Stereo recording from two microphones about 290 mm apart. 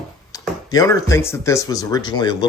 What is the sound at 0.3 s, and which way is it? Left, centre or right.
Speech, centre.